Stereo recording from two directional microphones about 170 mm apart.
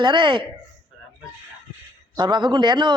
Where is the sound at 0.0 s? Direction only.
30° right (ahead or behind).